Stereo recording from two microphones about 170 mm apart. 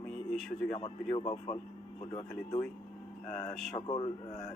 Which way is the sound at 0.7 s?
35° left (ahead or behind).